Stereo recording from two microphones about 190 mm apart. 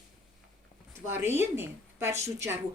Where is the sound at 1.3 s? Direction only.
10° right (ahead or behind).